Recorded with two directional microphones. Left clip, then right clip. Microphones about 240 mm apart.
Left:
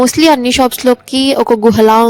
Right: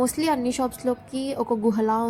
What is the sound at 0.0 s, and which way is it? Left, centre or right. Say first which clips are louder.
Speech: left 14 dB; left.